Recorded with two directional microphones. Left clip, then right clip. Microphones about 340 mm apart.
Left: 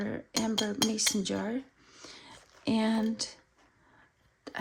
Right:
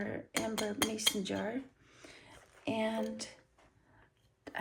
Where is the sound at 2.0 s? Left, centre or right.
Left.